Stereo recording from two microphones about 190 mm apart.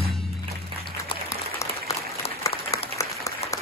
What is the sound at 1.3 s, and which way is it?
Applause, 15° left (ahead or behind).